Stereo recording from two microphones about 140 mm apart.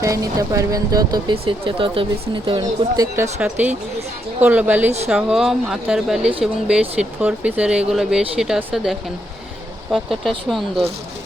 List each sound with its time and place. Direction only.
0.0 s speech: 25° right (ahead or behind)
3.4 s speech: 10° right (ahead or behind)